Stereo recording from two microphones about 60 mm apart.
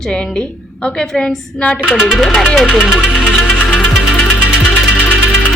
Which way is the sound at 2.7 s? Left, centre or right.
Centre.